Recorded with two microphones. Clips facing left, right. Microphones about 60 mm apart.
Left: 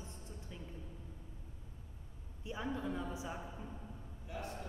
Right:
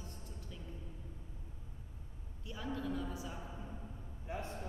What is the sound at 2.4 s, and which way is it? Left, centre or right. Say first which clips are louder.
A man's voice: left 1 dB; left.